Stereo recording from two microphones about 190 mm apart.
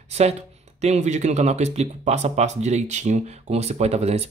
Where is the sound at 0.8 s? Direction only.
35° right (ahead or behind).